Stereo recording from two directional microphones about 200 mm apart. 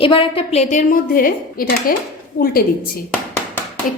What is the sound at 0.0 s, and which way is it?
A woman's voice, 25° left (ahead or behind).